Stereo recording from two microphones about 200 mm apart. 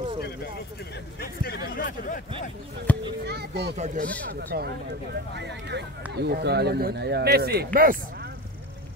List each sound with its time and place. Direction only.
1.2 s speech: 50° left (ahead or behind)
2.9 s speech: 10° left (ahead or behind)
3.3 s speech: 55° right (ahead or behind)
3.7 s speech: 40° right (ahead or behind)
4.4 s speech: 50° right (ahead or behind)